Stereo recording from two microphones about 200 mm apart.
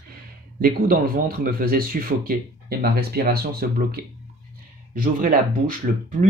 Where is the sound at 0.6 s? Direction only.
45° right (ahead or behind).